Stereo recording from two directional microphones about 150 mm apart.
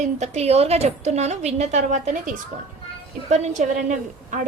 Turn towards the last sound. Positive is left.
turn(degrees=-55)  # may be behind; listen again after turning